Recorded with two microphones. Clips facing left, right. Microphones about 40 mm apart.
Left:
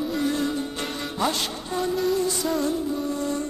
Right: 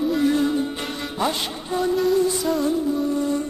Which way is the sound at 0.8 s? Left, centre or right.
Centre.